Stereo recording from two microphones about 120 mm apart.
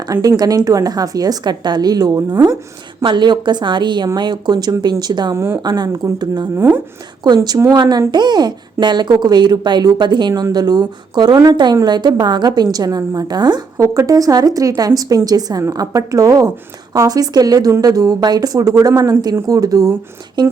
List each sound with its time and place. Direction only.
0.1 s a woman's voice: 30° right (ahead or behind)
6.6 s speech: 15° right (ahead or behind)
7.3 s a woman's voice: 35° right (ahead or behind)
13.8 s a woman's voice: 25° right (ahead or behind)